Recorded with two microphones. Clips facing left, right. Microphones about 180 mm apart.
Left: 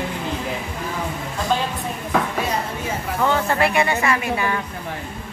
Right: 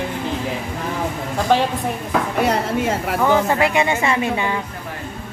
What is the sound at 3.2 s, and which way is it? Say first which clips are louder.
Speech: right 2 dB; 15° right (ahead or behind).